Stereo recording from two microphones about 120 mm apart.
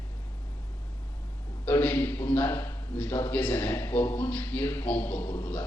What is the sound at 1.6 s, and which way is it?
A man's voice, 15° left (ahead or behind).